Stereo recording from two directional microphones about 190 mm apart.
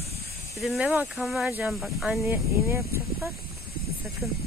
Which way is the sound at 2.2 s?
15° right (ahead or behind).